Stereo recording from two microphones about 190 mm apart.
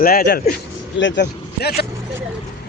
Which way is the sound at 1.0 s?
70° left (ahead or behind).